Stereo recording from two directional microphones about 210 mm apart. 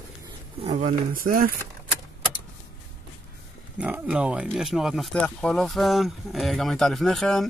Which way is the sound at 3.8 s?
5° right (ahead or behind).